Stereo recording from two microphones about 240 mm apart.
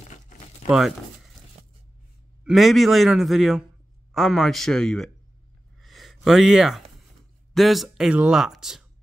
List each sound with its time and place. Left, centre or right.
0.0 s crumpling: left
0.7 s speech: centre
2.4 s speech: centre
5.8 s a sound: centre
7.5 s speech: centre